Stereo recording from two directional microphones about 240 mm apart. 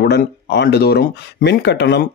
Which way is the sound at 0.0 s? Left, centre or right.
Left.